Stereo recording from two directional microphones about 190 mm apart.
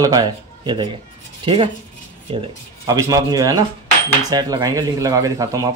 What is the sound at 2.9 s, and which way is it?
Speech, 20° right (ahead or behind).